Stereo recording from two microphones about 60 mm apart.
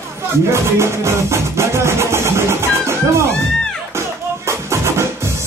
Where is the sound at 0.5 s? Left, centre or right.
Right.